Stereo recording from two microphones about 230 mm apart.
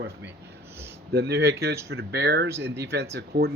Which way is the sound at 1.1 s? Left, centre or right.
Right.